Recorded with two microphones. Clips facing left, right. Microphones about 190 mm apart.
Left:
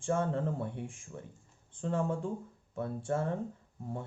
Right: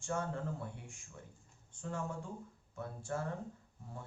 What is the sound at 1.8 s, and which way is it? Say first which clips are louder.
Speech: left 9 dB; 30° left (ahead or behind).